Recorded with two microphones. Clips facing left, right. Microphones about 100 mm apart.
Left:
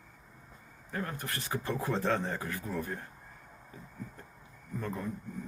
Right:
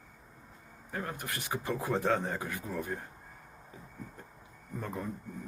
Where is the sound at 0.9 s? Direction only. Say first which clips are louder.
Left 1 dB; 15° right (ahead or behind).